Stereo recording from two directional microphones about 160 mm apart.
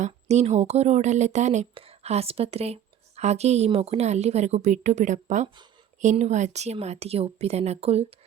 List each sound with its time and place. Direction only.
0.0 s a woman's voice: 45° right (ahead or behind)